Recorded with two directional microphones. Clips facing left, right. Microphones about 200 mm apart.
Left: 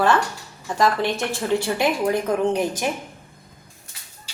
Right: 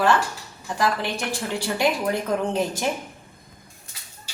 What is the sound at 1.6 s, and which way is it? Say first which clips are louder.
Speech: left 2 dB; 20° left (ahead or behind).